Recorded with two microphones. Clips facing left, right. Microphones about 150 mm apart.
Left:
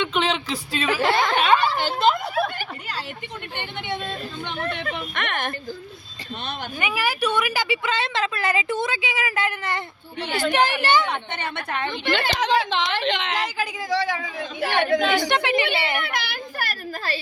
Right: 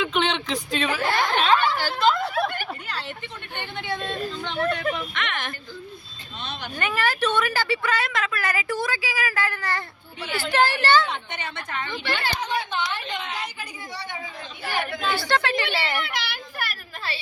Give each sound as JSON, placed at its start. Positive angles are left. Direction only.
{"t": 0.0, "sound": "a sound", "side_deg": 0}
{"t": 1.7, "sound": "speech", "side_deg": 20}
{"t": 3.6, "sound": "a woman's voice", "side_deg": 20}
{"t": 5.1, "sound": "speech", "side_deg": 50}
{"t": 6.7, "sound": "a woman's voice", "side_deg": 10}
{"t": 11.0, "sound": "speech", "side_deg": 60}
{"t": 12.3, "sound": "a woman's voice", "side_deg": 90}
{"t": 15.1, "sound": "a woman's voice", "side_deg": 20}
{"t": 16.0, "sound": "a sound", "side_deg": 50}